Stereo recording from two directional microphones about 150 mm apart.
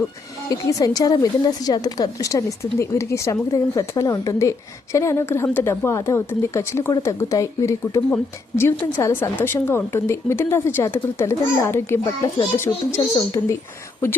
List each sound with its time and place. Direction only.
0.7 s a woman's voice: 25° left (ahead or behind)